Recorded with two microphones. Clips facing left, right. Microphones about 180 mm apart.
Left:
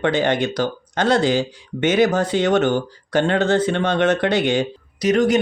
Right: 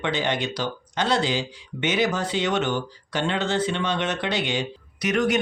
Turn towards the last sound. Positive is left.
turn(degrees=35)  # may be behind; listen again after turning